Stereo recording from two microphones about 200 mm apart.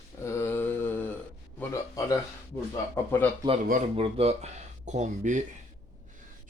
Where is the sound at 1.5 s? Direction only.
15° left (ahead or behind).